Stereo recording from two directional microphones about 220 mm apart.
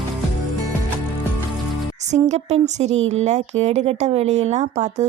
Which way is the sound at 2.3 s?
30° right (ahead or behind).